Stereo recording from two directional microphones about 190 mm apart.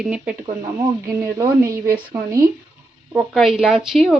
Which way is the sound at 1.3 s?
15° right (ahead or behind).